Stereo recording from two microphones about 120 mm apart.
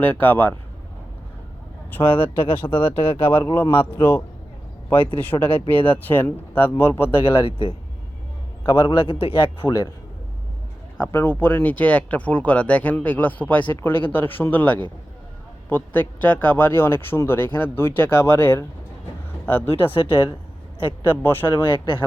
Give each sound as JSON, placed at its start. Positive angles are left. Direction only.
{"t": 0.0, "sound": "speech", "side_deg": 15}
{"t": 1.9, "sound": "a man's voice", "side_deg": 15}
{"t": 7.4, "sound": "a man's voice", "side_deg": 50}
{"t": 10.9, "sound": "a man's voice", "side_deg": 15}
{"t": 19.7, "sound": "a man's voice", "side_deg": 45}
{"t": 21.0, "sound": "speech", "side_deg": 20}